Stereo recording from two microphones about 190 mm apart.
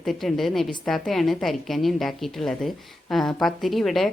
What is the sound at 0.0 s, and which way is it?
A woman's voice, centre (ahead or behind).